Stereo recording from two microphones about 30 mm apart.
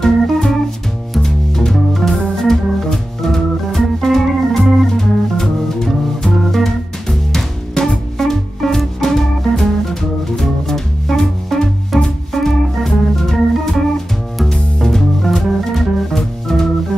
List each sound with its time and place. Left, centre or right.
0.0 s organ: centre
1.2 s music: centre
1.7 s organ: centre
4.9 s music: centre
12.6 s organ: centre
14.5 s music: centre
16.2 s organ: centre